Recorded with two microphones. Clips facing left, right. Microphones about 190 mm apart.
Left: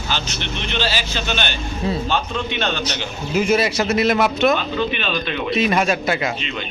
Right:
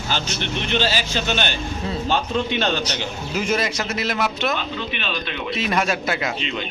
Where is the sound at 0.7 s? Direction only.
45° right (ahead or behind).